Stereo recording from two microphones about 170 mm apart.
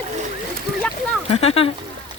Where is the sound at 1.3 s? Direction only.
35° left (ahead or behind).